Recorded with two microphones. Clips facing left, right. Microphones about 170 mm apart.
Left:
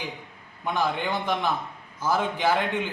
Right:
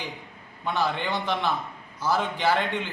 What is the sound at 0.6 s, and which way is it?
A man's voice, 10° left (ahead or behind).